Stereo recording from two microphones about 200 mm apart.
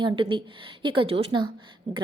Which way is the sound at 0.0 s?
25° right (ahead or behind).